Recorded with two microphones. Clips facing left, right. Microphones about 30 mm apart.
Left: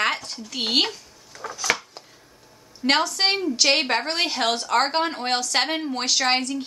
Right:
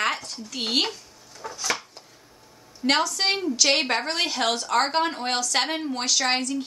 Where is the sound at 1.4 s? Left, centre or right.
Left.